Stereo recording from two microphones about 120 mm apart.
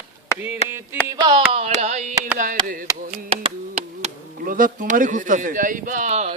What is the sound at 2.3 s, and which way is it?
Speech, 90° right.